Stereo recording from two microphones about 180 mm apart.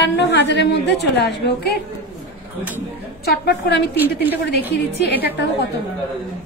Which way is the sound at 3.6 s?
65° left (ahead or behind).